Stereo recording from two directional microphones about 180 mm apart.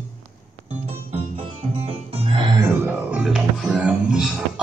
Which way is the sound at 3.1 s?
5° right (ahead or behind).